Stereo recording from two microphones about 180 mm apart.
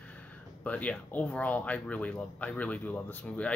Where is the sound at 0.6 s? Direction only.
5° left (ahead or behind).